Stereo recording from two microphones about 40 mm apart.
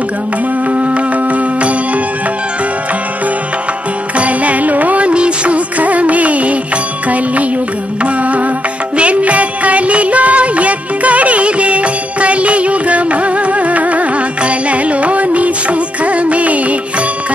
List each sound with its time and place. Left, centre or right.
0.7 s music: right
4.2 s music: right
8.0 s music: right